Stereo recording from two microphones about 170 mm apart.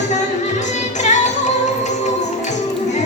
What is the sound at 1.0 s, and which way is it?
Music, 45° left (ahead or behind).